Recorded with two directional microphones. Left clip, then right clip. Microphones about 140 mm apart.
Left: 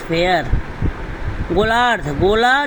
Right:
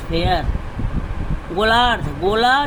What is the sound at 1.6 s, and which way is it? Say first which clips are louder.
Speech: even; 30° left (ahead or behind).